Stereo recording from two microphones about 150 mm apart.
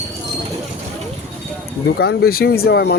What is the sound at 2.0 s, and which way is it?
Speech, 90° left.